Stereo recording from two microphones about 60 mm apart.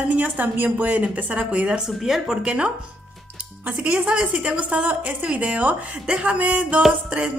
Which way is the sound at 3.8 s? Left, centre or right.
Centre.